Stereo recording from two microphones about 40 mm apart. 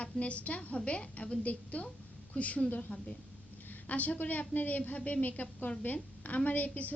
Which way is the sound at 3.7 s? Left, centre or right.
Left.